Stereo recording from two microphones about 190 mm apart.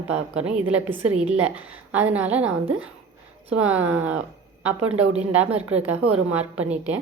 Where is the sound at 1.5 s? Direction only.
10° right (ahead or behind).